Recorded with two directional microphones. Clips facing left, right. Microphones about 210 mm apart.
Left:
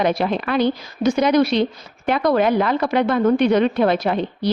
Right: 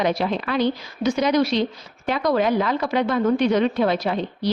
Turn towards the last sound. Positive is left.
turn(degrees=55)  # may be behind; listen again after turning